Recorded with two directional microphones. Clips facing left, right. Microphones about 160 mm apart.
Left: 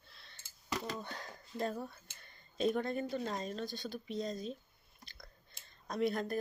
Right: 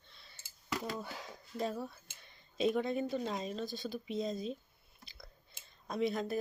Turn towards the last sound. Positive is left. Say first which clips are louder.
# even
turn(degrees=0)  # may be behind; listen again after turning